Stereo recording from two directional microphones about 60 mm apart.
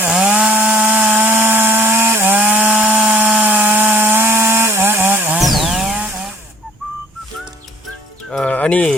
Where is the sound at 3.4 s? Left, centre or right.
Right.